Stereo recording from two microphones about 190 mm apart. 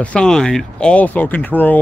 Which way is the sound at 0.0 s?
5° left (ahead or behind).